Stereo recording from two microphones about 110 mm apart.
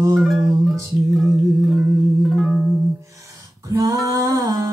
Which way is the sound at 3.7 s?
30° right (ahead or behind).